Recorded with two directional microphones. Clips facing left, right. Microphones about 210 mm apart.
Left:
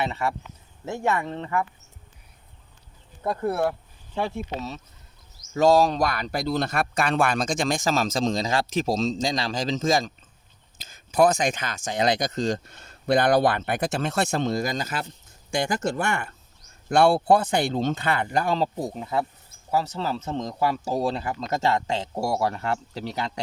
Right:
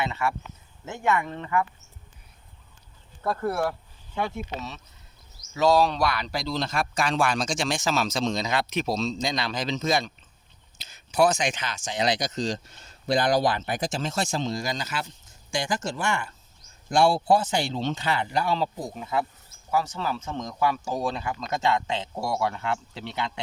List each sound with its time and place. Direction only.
0.0 s speech: 35° left (ahead or behind)
3.2 s speech: 20° left (ahead or behind)
5.5 s speech: 45° left (ahead or behind)
11.1 s speech: 55° left (ahead or behind)